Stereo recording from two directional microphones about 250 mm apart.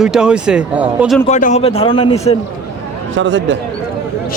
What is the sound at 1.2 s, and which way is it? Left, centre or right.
A man's voice, left.